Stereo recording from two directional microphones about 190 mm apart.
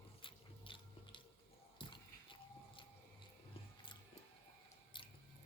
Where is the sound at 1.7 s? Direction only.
25° left (ahead or behind).